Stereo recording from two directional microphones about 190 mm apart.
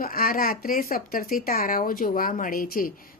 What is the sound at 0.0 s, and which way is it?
Speech, 50° left (ahead or behind).